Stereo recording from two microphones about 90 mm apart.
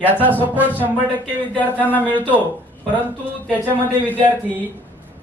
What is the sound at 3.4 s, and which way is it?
Speech, 20° right (ahead or behind).